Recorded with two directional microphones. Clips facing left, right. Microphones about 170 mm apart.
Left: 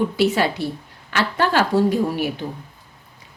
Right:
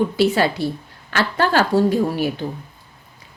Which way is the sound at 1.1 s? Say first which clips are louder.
Right 1 dB; 35° right (ahead or behind).